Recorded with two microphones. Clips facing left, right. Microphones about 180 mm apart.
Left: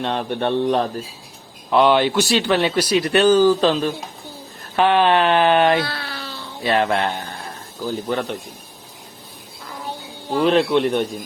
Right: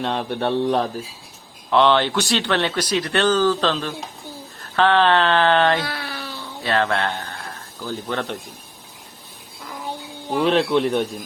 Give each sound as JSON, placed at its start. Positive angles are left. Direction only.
{"t": 0.0, "sound": "speech", "side_deg": 0}
{"t": 1.7, "sound": "speech", "side_deg": 10}
{"t": 5.8, "sound": "a sound", "side_deg": -15}
{"t": 6.6, "sound": "speech", "side_deg": 15}
{"t": 10.4, "sound": "speech", "side_deg": 0}